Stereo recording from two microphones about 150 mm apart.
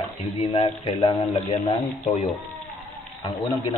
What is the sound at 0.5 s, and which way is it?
Speech, 35° left (ahead or behind).